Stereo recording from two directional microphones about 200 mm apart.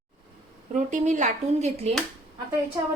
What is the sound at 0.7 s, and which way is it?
Speech, 40° right (ahead or behind).